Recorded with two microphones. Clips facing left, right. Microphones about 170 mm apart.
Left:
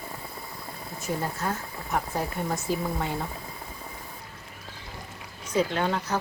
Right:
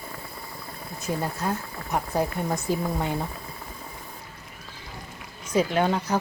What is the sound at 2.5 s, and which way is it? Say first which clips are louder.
Speech: right 2 dB; 15° right (ahead or behind).